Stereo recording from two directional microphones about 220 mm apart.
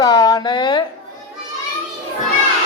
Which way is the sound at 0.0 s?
15° left (ahead or behind).